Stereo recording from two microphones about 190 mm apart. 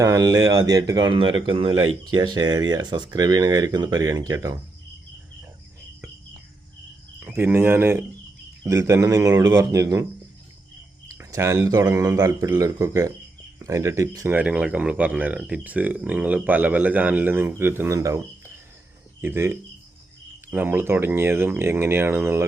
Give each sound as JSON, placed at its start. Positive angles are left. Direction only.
{"t": 0.0, "sound": "speech", "side_deg": -20}
{"t": 7.3, "sound": "speech", "side_deg": -10}
{"t": 11.2, "sound": "speech", "side_deg": -15}